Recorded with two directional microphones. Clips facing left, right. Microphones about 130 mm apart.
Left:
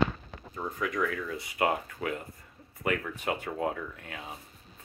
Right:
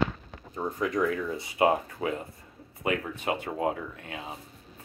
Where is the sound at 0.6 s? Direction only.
30° right (ahead or behind).